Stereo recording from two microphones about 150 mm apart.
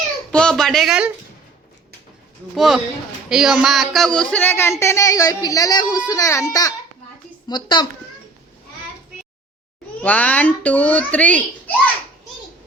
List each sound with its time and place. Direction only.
0.3 s speech: 5° left (ahead or behind)
2.6 s a woman's voice: centre (ahead or behind); by 7.9 s 30° left (ahead or behind)
10.0 s a child's voice: 10° left (ahead or behind)